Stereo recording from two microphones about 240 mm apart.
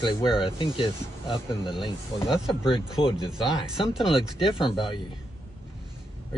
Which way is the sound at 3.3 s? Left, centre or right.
Centre.